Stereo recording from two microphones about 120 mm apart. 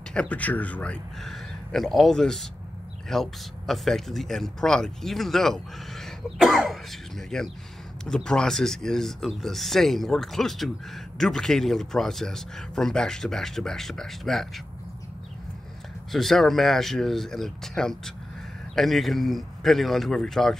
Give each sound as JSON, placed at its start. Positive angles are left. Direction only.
{"t": 0.1, "sound": "speech", "side_deg": 10}
{"t": 16.1, "sound": "speech", "side_deg": 0}